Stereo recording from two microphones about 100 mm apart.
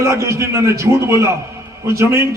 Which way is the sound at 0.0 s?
30° right (ahead or behind).